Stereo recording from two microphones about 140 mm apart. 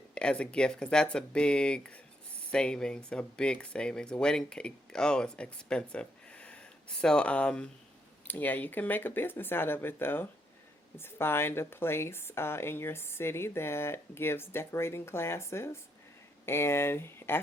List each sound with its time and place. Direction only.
0.1 s speech: 5° left (ahead or behind)